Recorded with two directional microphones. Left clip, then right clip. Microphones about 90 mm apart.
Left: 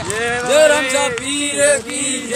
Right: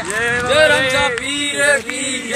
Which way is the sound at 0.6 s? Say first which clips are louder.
Even; 20° left (ahead or behind).